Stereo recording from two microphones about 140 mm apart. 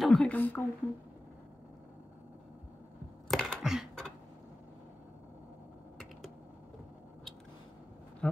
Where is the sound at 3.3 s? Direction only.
Centre (ahead or behind).